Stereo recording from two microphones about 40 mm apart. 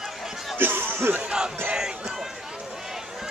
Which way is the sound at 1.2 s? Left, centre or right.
Right.